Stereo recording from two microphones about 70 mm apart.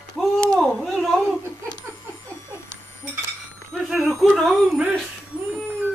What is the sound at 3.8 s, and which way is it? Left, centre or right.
Speech, centre.